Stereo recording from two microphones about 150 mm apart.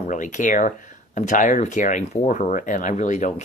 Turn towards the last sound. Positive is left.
turn(degrees=50)  # may be behind; listen again after turning